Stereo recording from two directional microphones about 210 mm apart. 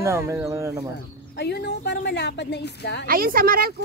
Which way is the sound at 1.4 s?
50° left (ahead or behind).